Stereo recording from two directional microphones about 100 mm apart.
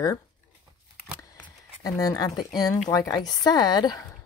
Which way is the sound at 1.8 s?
35° left (ahead or behind).